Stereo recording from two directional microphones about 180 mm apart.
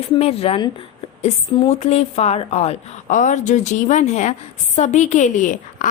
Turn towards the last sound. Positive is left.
turn(degrees=45)  # may be behind; listen again after turning